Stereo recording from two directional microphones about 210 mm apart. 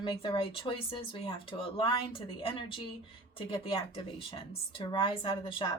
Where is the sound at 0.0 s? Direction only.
25° left (ahead or behind).